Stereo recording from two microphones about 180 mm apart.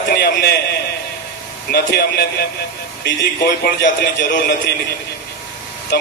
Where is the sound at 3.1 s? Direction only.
70° left (ahead or behind).